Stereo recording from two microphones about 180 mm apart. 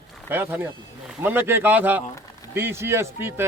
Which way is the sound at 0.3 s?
10° right (ahead or behind).